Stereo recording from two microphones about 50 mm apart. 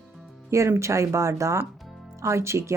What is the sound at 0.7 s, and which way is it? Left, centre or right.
Speech, right.